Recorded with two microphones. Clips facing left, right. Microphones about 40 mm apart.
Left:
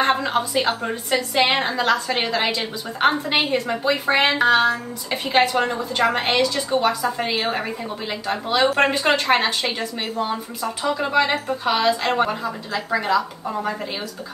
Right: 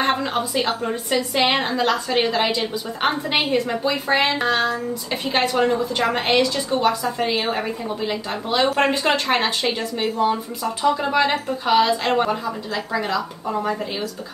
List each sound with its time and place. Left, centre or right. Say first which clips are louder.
0.0 s a woman's voice: left 1 dB; centre
3.8 s a woman's voice: left 1 dB; centre